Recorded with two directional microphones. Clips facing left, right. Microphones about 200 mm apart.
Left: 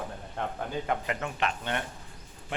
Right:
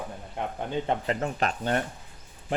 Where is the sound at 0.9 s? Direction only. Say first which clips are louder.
Right 4 dB; 35° right (ahead or behind).